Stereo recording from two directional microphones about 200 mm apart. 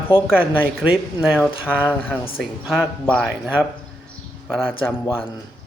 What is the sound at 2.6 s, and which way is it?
Speech, 5° right (ahead or behind).